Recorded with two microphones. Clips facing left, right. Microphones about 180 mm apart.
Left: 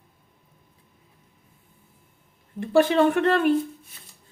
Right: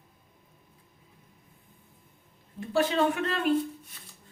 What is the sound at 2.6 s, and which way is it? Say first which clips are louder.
Speech: left 7 dB; 60° left (ahead or behind).